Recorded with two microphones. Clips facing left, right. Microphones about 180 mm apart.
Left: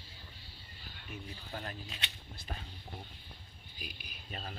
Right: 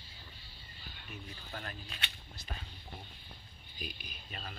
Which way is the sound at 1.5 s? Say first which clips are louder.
Left 2 dB; 20° left (ahead or behind).